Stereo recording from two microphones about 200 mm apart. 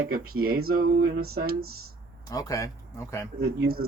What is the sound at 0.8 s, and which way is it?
Speech, 50° right (ahead or behind).